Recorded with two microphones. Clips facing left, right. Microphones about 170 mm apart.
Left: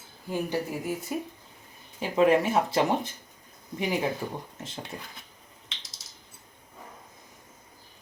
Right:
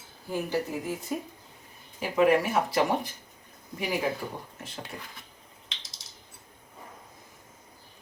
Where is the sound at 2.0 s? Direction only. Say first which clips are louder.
Left 1 dB; 25° left (ahead or behind).